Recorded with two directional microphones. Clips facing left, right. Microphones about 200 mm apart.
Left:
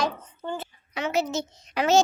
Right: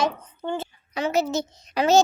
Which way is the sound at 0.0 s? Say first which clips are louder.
Right 3 dB; 25° right (ahead or behind).